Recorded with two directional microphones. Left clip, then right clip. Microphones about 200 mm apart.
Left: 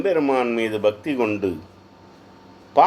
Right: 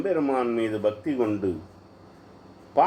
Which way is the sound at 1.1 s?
35° left (ahead or behind).